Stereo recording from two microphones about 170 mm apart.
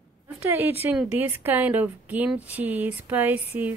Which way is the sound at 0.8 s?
10° right (ahead or behind).